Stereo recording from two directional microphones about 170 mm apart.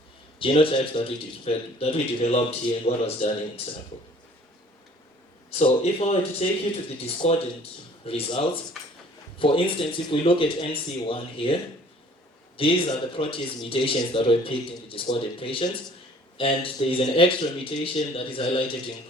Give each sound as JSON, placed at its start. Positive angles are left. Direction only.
{"t": 0.3, "sound": "speech", "side_deg": 30}
{"t": 5.5, "sound": "speech", "side_deg": 40}
{"t": 12.5, "sound": "speech", "side_deg": 30}